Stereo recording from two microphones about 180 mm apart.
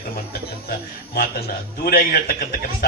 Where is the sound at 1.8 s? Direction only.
55° left (ahead or behind).